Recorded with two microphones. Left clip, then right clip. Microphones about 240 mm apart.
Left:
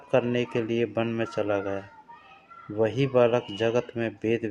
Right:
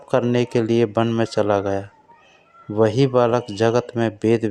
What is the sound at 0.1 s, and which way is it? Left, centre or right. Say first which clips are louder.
Speech: right 6 dB; right.